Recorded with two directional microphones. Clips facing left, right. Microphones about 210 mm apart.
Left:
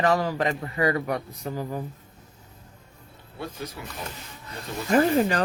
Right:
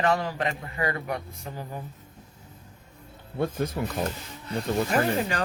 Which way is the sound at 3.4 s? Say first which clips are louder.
Right 8 dB; 50° right (ahead or behind).